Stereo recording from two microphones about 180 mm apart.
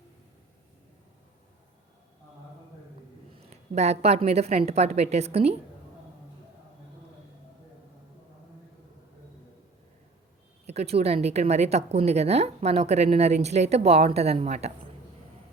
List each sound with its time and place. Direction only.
3.7 s speech: 35° right (ahead or behind)
10.7 s speech: 35° right (ahead or behind)